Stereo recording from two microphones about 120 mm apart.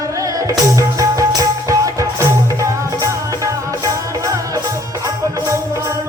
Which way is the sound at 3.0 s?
25° right (ahead or behind).